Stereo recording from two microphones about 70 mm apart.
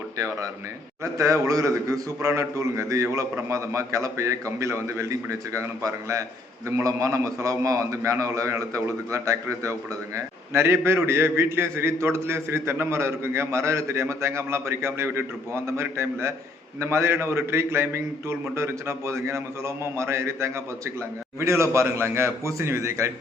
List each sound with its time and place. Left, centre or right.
0.2 s a man's voice: right
10.2 s a man's voice: right